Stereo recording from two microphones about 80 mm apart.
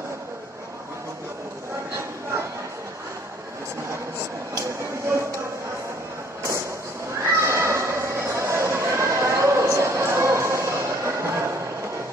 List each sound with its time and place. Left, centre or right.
4.6 s vehicle: right
7.2 s neigh: right